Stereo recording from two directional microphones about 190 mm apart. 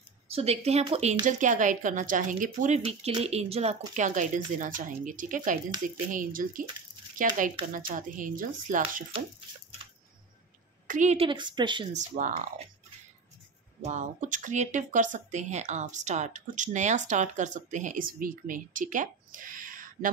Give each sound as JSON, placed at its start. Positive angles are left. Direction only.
{"t": 0.3, "sound": "a woman's voice", "side_deg": -35}
{"t": 10.9, "sound": "a woman's voice", "side_deg": -40}
{"t": 11.9, "sound": "speech", "side_deg": -40}
{"t": 13.8, "sound": "speech", "side_deg": -40}